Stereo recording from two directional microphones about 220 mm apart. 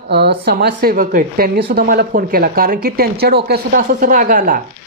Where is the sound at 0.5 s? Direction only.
45° right (ahead or behind).